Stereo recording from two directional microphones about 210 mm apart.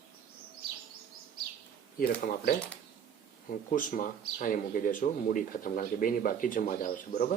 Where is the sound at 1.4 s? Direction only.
45° right (ahead or behind).